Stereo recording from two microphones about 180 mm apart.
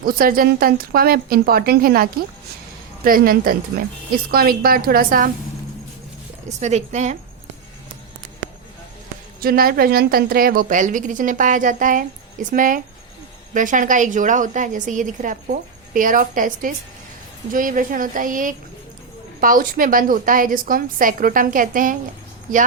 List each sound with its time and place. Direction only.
0.0 s a woman's voice: 55° right (ahead or behind)
6.6 s a woman's voice: 40° right (ahead or behind)
9.4 s a woman's voice: 55° right (ahead or behind)